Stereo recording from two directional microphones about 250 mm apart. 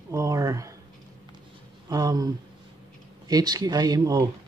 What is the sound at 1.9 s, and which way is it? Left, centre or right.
Speech, centre.